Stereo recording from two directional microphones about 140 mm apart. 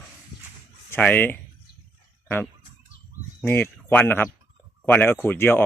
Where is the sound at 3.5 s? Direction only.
15° left (ahead or behind).